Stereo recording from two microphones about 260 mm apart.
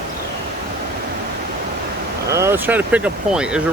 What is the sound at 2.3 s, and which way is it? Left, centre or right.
Speech, centre.